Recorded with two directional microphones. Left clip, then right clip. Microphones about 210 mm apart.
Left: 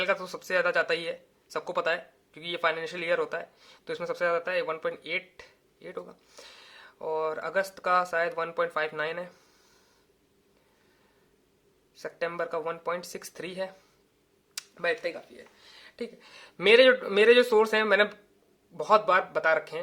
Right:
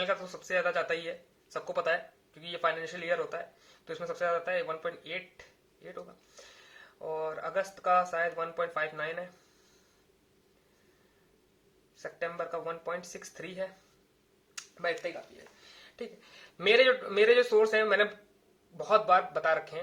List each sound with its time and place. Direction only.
0.0 s speech: 45° left (ahead or behind)
12.0 s speech: 45° left (ahead or behind)
14.5 s a sound: 45° left (ahead or behind)
15.8 s speech: 35° left (ahead or behind)